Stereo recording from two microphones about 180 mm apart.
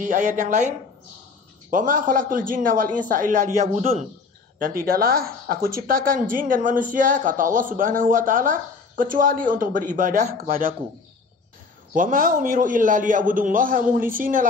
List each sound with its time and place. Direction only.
0.0 s speech: 45° right (ahead or behind)
4.6 s speech: 50° right (ahead or behind)
11.9 s speech: 50° right (ahead or behind)